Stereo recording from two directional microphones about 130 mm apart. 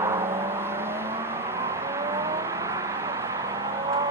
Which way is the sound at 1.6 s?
20° right (ahead or behind).